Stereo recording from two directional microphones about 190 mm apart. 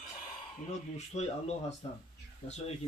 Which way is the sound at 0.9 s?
35° left (ahead or behind).